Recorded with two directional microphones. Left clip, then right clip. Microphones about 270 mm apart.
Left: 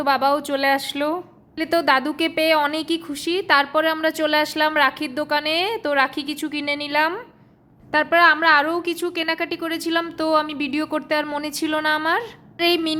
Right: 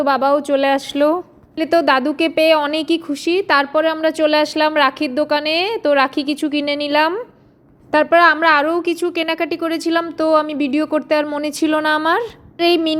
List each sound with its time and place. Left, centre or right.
0.0 s a woman's voice: centre